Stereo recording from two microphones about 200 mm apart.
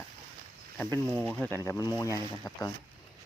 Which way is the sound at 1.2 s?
5° left (ahead or behind).